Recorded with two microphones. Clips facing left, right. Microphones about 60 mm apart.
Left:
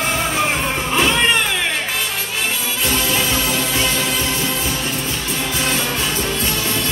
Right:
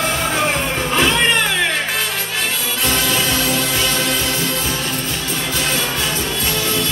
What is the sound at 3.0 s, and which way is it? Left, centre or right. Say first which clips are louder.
Music: right 1 dB; left.